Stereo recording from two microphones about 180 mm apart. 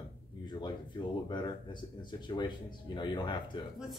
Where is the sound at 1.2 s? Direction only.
25° left (ahead or behind).